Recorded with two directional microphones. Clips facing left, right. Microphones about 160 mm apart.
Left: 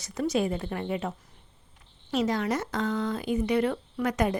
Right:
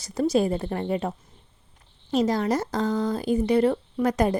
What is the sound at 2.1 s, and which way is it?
Speech, 35° right (ahead or behind).